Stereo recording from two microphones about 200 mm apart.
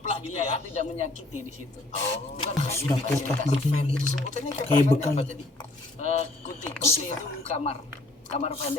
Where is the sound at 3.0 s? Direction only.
35° left (ahead or behind).